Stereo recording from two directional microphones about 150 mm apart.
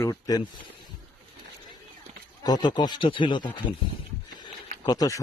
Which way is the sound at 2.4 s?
30° left (ahead or behind).